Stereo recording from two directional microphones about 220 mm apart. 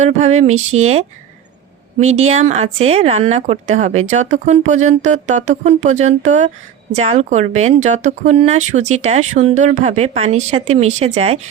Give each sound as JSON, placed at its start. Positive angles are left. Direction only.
{"t": 0.0, "sound": "speech", "side_deg": -30}
{"t": 2.0, "sound": "speech", "side_deg": -30}